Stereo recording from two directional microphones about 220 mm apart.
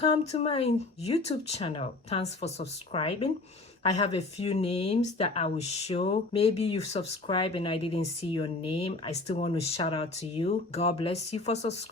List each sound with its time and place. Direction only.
0.0 s speech: 25° left (ahead or behind)